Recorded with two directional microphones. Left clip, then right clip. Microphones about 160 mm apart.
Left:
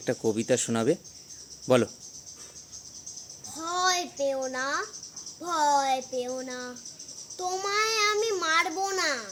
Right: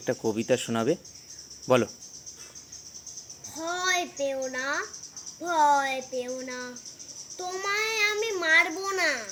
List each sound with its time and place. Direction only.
0.3 s speech: 25° left (ahead or behind)
3.5 s babbling: 15° left (ahead or behind)
5.5 s a child's voice: 15° left (ahead or behind)